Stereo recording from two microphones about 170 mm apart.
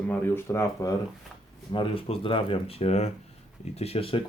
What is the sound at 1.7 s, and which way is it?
Speech, 30° left (ahead or behind).